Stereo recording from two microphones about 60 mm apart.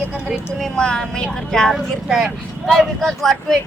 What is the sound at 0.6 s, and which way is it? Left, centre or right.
A woman's voice, centre.